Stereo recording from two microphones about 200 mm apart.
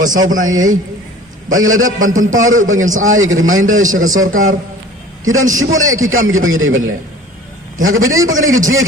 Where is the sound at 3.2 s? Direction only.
90° right.